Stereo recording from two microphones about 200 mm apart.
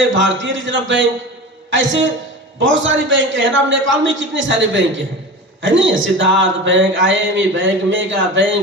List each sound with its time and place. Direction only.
0.1 s a man's voice: 70° right (ahead or behind)